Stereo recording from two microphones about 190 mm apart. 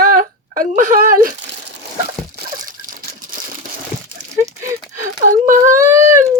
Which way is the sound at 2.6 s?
45° right (ahead or behind).